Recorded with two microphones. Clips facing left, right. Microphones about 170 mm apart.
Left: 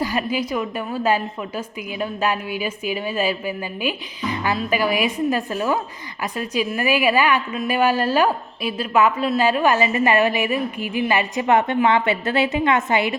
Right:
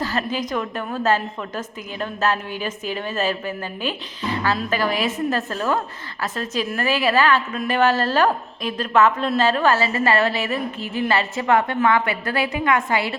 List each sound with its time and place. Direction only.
0.0 s a woman's voice: 10° left (ahead or behind)